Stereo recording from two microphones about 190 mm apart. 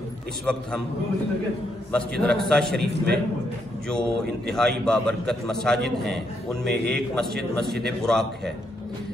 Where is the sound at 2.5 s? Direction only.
5° left (ahead or behind).